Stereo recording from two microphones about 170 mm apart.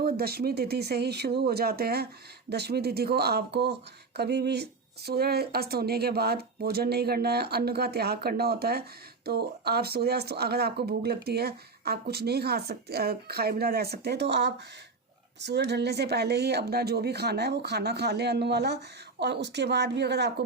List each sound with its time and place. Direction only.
0.0 s a woman's voice: 65° right (ahead or behind); by 20.3 s 80° right